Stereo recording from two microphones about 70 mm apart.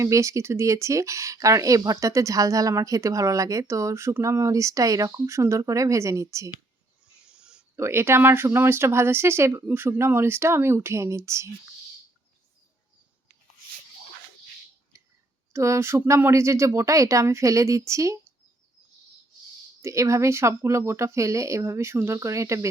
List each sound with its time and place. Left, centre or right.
0.0 s speech: right
7.3 s a sound: centre
7.8 s speech: right
15.5 s speech: right
19.8 s speech: right